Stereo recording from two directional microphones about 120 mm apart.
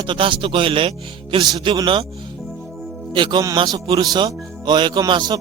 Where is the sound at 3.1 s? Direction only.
40° right (ahead or behind).